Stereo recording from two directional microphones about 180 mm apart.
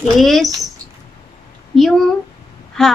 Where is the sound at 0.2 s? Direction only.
Centre (ahead or behind).